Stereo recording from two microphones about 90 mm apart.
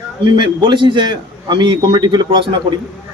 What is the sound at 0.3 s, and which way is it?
Speech, 60° right (ahead or behind).